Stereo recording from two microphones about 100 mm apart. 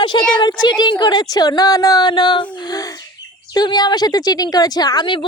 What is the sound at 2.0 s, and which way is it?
A woman's voice, 50° left (ahead or behind).